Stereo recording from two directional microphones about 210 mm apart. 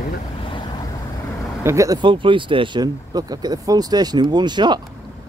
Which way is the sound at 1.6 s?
15° right (ahead or behind).